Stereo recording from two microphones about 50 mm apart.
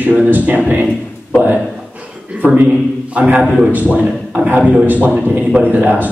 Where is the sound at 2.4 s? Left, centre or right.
Right.